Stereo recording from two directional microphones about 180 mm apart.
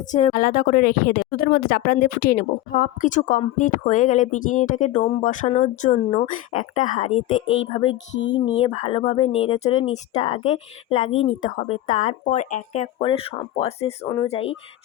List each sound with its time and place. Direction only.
0.1 s a woman's voice: 45° left (ahead or behind)
7.4 s speech: 90° left
7.7 s speech: 30° left (ahead or behind)
8.1 s speech: 85° left
8.5 s speech: 35° left (ahead or behind)